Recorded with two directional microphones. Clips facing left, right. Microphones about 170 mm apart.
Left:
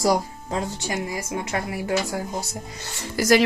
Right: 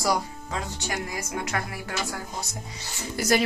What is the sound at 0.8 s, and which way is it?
A woman's voice, 20° left (ahead or behind).